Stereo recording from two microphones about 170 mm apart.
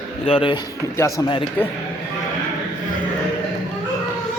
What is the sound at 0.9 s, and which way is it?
Speech, 15° left (ahead or behind).